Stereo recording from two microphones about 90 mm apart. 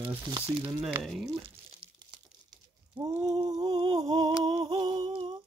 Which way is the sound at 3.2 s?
50° right (ahead or behind).